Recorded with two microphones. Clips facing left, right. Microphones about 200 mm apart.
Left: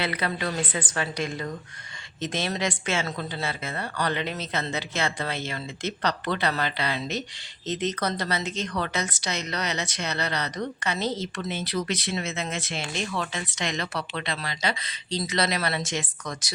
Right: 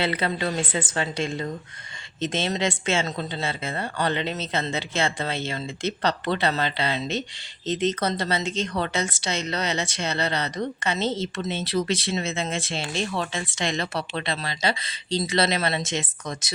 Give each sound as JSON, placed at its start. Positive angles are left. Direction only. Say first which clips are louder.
{"t": 0.0, "sound": "a woman's voice", "louder": "right 3 dB", "side_deg": -25}